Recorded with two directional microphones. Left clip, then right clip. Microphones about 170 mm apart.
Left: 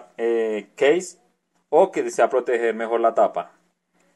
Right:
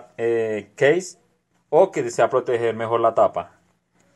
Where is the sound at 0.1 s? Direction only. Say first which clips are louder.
Even; centre (ahead or behind).